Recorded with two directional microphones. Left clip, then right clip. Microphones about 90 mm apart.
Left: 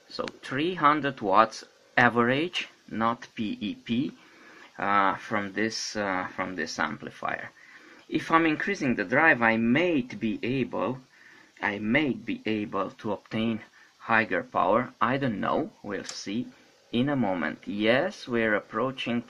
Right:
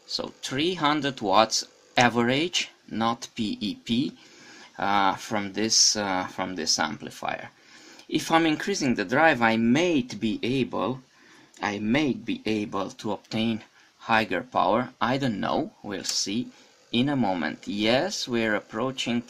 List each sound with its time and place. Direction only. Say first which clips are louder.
0.1 s speech: right 2 dB; 35° right (ahead or behind)
0.6 s speech: left 1 dB; 50° right (ahead or behind)
2.9 s speech: left 1 dB; 60° right (ahead or behind); by 4.1 s 85° right
4.7 s speech: right 1 dB; 55° right (ahead or behind)
12.9 s speech: right 1 dB; 40° right (ahead or behind)
14.5 s speech: right 2 dB; 40° right (ahead or behind)
16.9 s speech: right 2 dB; 40° right (ahead or behind)